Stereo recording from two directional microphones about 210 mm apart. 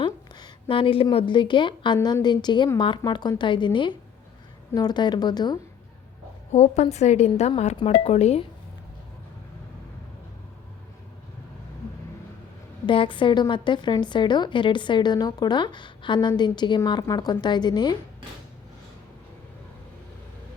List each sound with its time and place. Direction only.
0.0 s a woman's voice: 20° left (ahead or behind)
6.5 s speech: 35° left (ahead or behind)
12.8 s a woman's voice: 25° left (ahead or behind)